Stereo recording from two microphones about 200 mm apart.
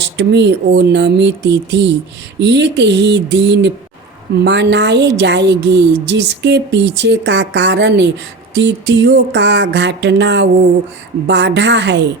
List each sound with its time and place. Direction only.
0.0 s a woman's voice: 60° right (ahead or behind)